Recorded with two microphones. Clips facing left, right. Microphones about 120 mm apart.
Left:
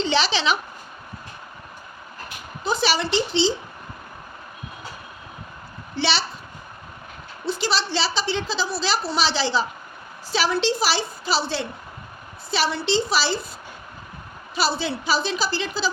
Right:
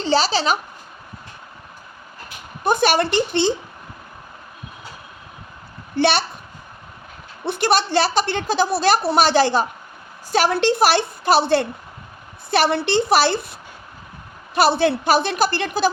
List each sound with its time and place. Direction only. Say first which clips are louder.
0.0 s speech: right 3 dB; 40° right (ahead or behind)
2.6 s a woman's voice: right 5 dB; 55° right (ahead or behind)
6.0 s a woman's voice: right 6 dB; 50° right (ahead or behind)
7.4 s a woman's voice: right 6 dB; 60° right (ahead or behind)